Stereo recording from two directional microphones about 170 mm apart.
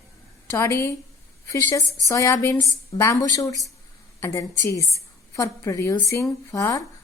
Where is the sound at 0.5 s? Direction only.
15° left (ahead or behind).